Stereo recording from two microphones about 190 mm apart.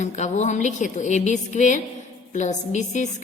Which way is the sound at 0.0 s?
40° left (ahead or behind).